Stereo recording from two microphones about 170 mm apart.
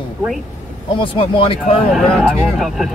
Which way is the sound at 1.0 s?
30° left (ahead or behind).